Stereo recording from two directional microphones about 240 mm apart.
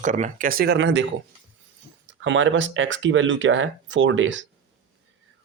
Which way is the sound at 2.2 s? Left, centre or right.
Right.